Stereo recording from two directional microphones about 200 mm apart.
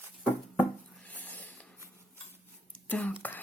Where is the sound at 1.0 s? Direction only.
10° left (ahead or behind).